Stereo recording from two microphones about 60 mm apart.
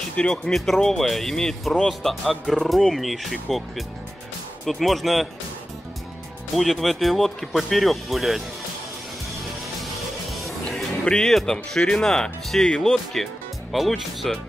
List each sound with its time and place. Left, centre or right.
0.1 s speech: centre
0.5 s speech: centre
6.5 s speech: centre
10.3 s music: centre
11.1 s speech: centre